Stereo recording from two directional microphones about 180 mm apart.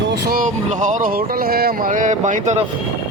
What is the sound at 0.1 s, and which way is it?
Speech, 55° right (ahead or behind).